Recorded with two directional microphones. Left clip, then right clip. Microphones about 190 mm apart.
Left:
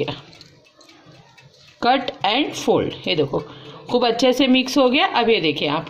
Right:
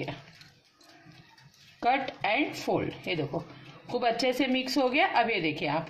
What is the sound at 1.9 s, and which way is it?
Speech, 45° left (ahead or behind).